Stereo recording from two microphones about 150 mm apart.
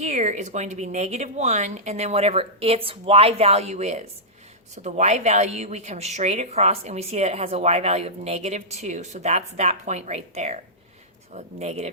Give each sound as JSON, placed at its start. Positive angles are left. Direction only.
{"t": 0.0, "sound": "speech", "side_deg": -50}